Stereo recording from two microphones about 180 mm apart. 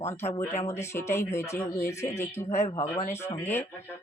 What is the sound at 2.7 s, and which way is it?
Speech, 25° left (ahead or behind).